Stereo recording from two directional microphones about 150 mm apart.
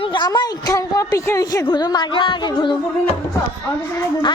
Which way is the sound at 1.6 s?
25° left (ahead or behind).